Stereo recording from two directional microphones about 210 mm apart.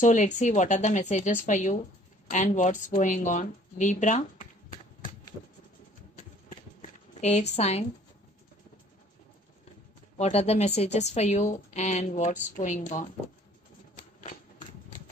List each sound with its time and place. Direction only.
0.0 s a woman's voice: 35° left (ahead or behind)
7.2 s speech: 35° left (ahead or behind)
10.1 s a woman's voice: 30° left (ahead or behind)